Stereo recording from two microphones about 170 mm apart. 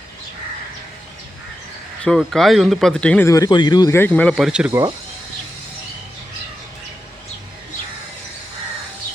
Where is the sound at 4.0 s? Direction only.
10° left (ahead or behind).